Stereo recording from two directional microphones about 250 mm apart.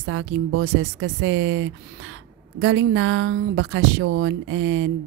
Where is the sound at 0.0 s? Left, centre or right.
Right.